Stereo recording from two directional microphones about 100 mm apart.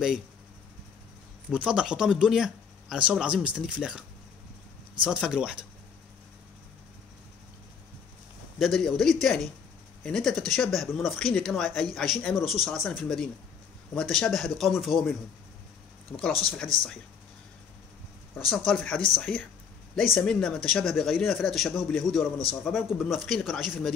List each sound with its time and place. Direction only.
1.5 s speech: 10° right (ahead or behind)
5.0 s speech: 10° right (ahead or behind)
8.5 s speech: centre (ahead or behind)
16.1 s speech: 15° left (ahead or behind)
16.4 s speech: 5° left (ahead or behind)
18.7 s speech: 10° left (ahead or behind)